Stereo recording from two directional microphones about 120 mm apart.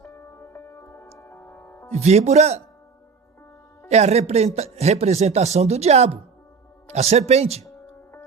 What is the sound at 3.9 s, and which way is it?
Speech, 65° right (ahead or behind).